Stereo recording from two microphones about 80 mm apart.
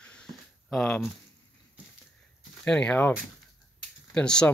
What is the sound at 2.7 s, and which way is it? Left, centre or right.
Speech, centre.